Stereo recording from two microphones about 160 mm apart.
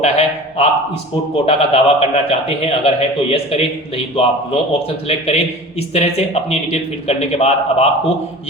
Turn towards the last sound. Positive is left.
turn(degrees=40)  # may be behind; listen again after turning